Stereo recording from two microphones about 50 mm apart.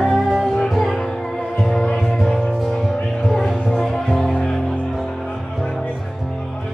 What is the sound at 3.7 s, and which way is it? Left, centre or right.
Music, centre.